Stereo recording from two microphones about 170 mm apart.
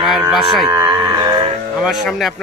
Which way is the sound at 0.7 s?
20° right (ahead or behind).